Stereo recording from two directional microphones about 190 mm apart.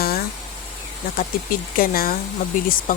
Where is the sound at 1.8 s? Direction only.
50° left (ahead or behind).